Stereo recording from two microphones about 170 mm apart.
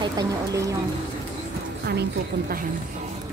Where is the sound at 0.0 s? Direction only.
20° right (ahead or behind).